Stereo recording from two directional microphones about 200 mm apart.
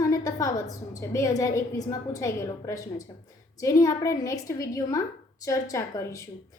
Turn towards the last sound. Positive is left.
turn(degrees=15)  # may be behind; listen again after turning